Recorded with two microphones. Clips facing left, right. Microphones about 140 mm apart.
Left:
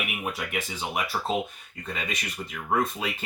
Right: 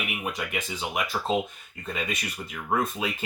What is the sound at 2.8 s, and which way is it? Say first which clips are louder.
Speech: even; 5° right (ahead or behind).